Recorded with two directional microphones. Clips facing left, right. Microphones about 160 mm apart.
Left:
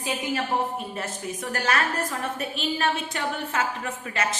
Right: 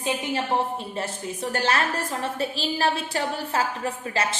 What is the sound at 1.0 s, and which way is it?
A woman's voice, 30° right (ahead or behind).